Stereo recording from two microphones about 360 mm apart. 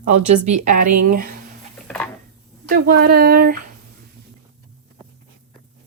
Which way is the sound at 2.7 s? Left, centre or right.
Right.